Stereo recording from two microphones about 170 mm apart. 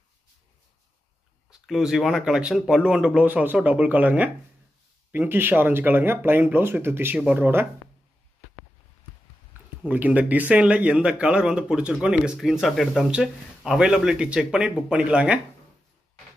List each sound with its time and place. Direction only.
1.5 s speech: 5° right (ahead or behind)
9.8 s speech: 10° right (ahead or behind)